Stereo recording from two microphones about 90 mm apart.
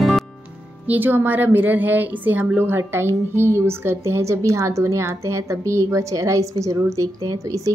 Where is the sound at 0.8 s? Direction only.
20° right (ahead or behind).